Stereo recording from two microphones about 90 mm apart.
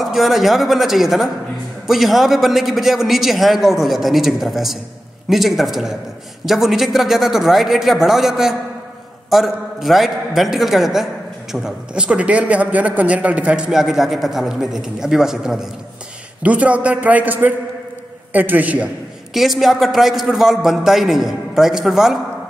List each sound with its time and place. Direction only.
0.0 s a man's voice: centre (ahead or behind); by 18.9 s 15° right (ahead or behind)
19.3 s a man's voice: centre (ahead or behind)